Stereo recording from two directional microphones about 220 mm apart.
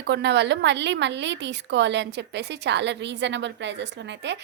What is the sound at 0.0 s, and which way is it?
A woman's voice, 50° right (ahead or behind).